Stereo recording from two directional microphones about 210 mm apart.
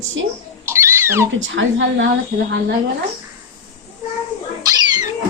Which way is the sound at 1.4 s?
65° right (ahead or behind).